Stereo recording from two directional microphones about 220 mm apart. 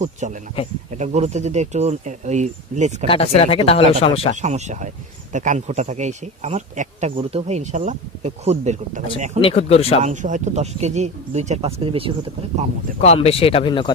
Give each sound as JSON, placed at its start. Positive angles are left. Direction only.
{"t": 0.2, "sound": "speech", "side_deg": -35}
{"t": 3.1, "sound": "speech", "side_deg": 25}
{"t": 4.4, "sound": "speech", "side_deg": -30}
{"t": 9.4, "sound": "speech", "side_deg": 30}
{"t": 10.0, "sound": "speech", "side_deg": -35}
{"t": 13.0, "sound": "speech", "side_deg": 30}